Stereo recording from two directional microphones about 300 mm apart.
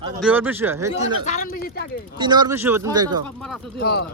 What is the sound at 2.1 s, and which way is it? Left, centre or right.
Speech, centre.